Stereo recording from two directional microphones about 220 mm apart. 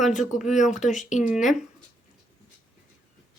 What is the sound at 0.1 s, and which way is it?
Speech, 35° left (ahead or behind).